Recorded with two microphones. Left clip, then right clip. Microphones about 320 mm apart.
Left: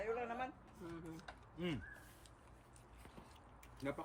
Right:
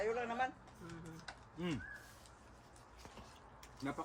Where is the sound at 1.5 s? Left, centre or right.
Centre.